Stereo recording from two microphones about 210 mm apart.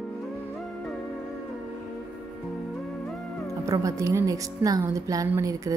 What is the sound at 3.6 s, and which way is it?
Speech, 15° right (ahead or behind).